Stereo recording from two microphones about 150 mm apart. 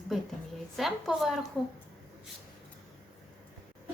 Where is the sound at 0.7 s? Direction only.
Centre (ahead or behind).